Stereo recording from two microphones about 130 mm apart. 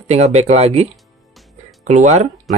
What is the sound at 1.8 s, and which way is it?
Speech, 60° right (ahead or behind).